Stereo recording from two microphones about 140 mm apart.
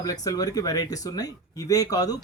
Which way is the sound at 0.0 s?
25° left (ahead or behind).